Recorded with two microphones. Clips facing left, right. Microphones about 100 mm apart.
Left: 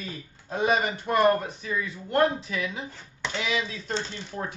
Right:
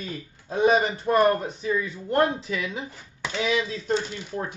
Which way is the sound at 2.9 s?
10° right (ahead or behind).